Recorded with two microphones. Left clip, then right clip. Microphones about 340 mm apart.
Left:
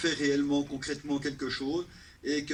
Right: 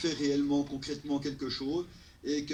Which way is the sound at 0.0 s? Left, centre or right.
Left.